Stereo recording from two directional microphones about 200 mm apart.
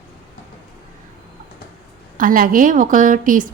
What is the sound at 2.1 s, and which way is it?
A woman's voice, 45° right (ahead or behind).